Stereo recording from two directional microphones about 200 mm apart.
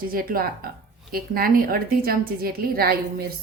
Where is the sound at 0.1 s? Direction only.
45° right (ahead or behind).